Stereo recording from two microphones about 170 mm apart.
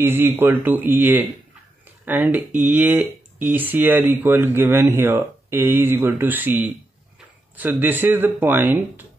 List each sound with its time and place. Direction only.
0.0 s speech: 10° right (ahead or behind)